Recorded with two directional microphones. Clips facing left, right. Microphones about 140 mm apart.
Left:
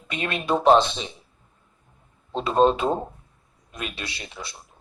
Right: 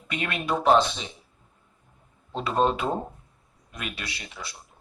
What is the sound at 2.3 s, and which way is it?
Speech, 25° left (ahead or behind).